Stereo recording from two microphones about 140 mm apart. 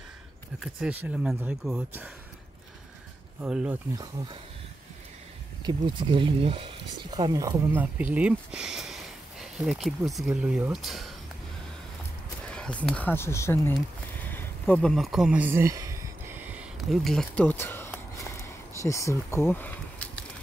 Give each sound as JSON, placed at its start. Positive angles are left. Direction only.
{"t": 0.7, "sound": "speech", "side_deg": -5}
{"t": 3.4, "sound": "speech", "side_deg": -5}
{"t": 3.9, "sound": "speech", "side_deg": -25}
{"t": 5.6, "sound": "speech", "side_deg": -35}
{"t": 7.2, "sound": "speech", "side_deg": -25}
{"t": 12.4, "sound": "speech", "side_deg": 5}
{"t": 14.2, "sound": "a sound", "side_deg": 10}
{"t": 16.9, "sound": "speech", "side_deg": 0}